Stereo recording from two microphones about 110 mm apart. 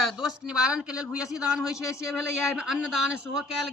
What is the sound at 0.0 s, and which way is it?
A man's voice, centre (ahead or behind).